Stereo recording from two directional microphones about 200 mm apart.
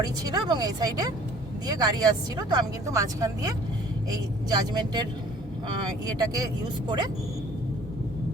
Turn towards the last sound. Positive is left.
turn(degrees=-20)  # may be behind; listen again after turning